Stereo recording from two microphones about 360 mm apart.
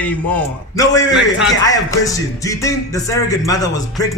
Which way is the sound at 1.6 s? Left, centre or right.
Centre.